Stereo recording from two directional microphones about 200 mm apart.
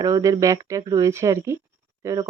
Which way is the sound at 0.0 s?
15° right (ahead or behind).